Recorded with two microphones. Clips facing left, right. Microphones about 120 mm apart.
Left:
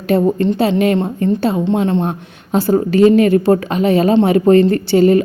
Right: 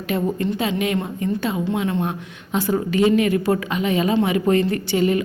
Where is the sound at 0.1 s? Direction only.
30° left (ahead or behind).